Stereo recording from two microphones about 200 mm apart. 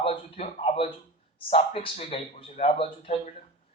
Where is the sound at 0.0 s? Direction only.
30° left (ahead or behind).